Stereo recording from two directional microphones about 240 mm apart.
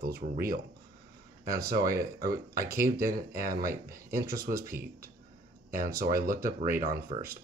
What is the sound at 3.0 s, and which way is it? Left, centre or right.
Speech, right.